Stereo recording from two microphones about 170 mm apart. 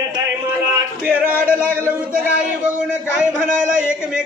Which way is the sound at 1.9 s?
5° right (ahead or behind).